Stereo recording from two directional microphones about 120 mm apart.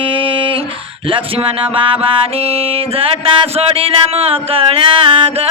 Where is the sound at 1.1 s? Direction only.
45° right (ahead or behind).